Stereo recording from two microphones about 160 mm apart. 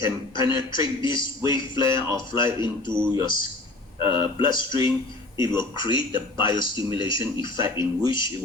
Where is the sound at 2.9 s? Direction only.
15° right (ahead or behind).